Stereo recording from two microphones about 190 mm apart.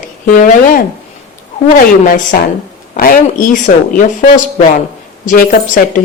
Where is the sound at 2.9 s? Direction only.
45° left (ahead or behind).